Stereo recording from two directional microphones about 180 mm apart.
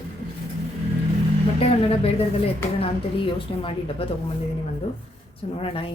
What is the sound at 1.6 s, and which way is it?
Speech, 35° left (ahead or behind).